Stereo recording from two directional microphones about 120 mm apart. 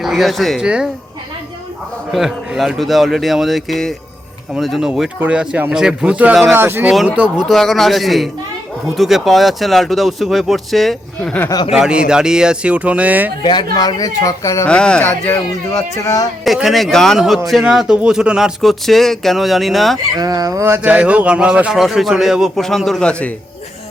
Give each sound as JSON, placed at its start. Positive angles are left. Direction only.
{"t": 0.0, "sound": "speech", "side_deg": 0}
{"t": 2.1, "sound": "speech", "side_deg": 0}
{"t": 6.9, "sound": "speech", "side_deg": -5}
{"t": 11.7, "sound": "speech", "side_deg": -5}
{"t": 13.4, "sound": "speech", "side_deg": 40}
{"t": 14.7, "sound": "speech", "side_deg": 10}
{"t": 16.0, "sound": "speech", "side_deg": 25}
{"t": 16.4, "sound": "speech", "side_deg": 0}
{"t": 20.1, "sound": "speech", "side_deg": -30}